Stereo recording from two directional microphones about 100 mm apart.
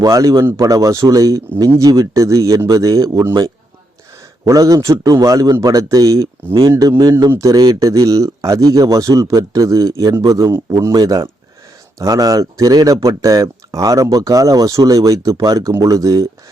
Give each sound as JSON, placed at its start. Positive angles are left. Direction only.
{"t": 0.0, "sound": "speech", "side_deg": -35}